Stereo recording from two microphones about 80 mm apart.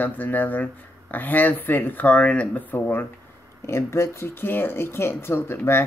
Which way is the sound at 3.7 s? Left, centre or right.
Left.